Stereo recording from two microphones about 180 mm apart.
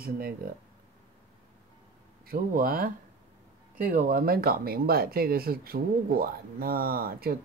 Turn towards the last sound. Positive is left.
turn(degrees=-55)  # may be behind; listen again after turning